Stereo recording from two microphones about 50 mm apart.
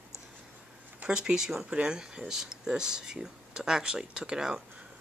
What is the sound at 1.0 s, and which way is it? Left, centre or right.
Speech, centre.